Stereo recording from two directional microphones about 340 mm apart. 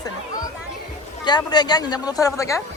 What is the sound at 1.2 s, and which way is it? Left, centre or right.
Speech, centre.